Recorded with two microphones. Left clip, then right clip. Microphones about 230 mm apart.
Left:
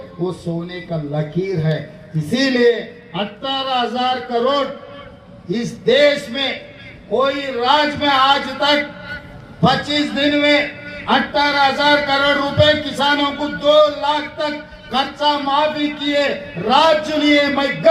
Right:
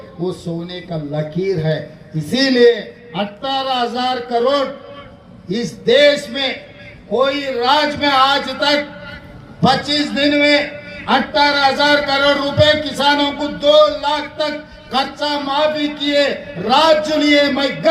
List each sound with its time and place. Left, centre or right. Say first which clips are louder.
0.3 s a man's voice: right 3 dB; right